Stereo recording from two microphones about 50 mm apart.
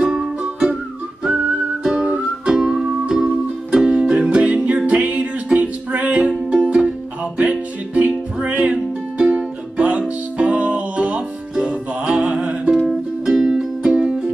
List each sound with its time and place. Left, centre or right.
0.0 s music: centre
1.8 s music: centre
2.0 s music: right
2.5 s music: centre
3.8 s music: centre
7.3 s music: right
12.7 s music: centre